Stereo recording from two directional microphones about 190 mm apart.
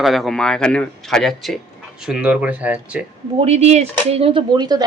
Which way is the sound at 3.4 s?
35° right (ahead or behind).